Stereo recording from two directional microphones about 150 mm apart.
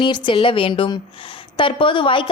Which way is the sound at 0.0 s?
30° left (ahead or behind).